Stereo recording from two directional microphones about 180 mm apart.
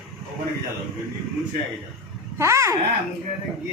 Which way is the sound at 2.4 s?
15° right (ahead or behind).